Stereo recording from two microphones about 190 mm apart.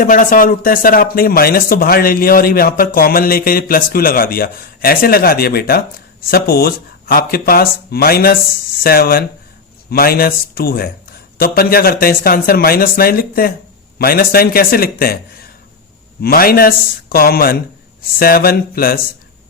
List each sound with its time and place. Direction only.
0.0 s speech: 45° left (ahead or behind)
16.2 s speech: 50° left (ahead or behind)